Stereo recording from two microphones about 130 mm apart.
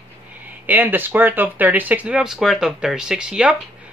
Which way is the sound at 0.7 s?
15° right (ahead or behind).